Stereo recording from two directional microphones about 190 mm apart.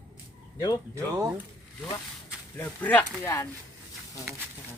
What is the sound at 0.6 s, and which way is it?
Speech, 20° left (ahead or behind).